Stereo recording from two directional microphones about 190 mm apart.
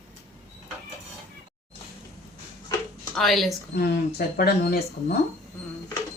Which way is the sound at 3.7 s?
55° left (ahead or behind).